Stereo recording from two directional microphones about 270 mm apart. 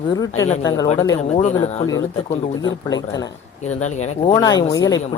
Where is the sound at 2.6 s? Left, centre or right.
Centre.